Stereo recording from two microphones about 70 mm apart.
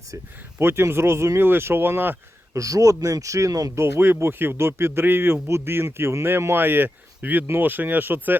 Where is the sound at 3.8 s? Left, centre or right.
Right.